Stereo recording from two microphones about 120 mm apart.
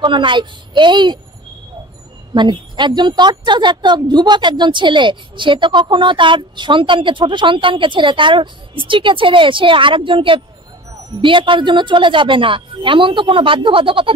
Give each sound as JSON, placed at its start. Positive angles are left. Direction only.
{"t": 0.0, "sound": "a woman's voice", "side_deg": -40}
{"t": 2.3, "sound": "a woman's voice", "side_deg": -40}